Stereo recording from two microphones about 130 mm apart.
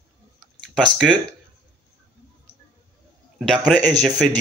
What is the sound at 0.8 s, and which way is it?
Speech, 5° left (ahead or behind).